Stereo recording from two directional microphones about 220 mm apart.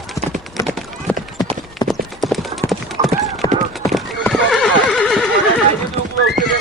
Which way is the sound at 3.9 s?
Centre (ahead or behind).